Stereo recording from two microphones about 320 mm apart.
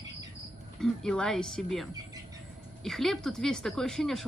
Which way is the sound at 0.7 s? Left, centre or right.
Centre.